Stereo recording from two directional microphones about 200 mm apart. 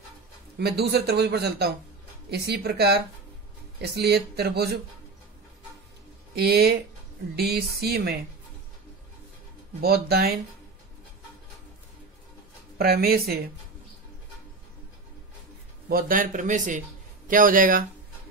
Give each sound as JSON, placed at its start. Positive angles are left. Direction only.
{"t": 0.6, "sound": "speech", "side_deg": -55}
{"t": 6.3, "sound": "speech", "side_deg": -50}
{"t": 9.8, "sound": "speech", "side_deg": -50}
{"t": 12.7, "sound": "speech", "side_deg": -50}
{"t": 15.9, "sound": "speech", "side_deg": -45}